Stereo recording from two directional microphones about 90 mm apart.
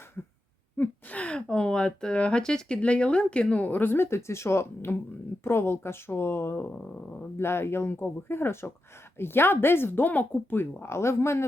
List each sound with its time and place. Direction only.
0.8 s speech: 15° left (ahead or behind)
6.7 s speech: 15° left (ahead or behind)
7.3 s speech: 25° left (ahead or behind)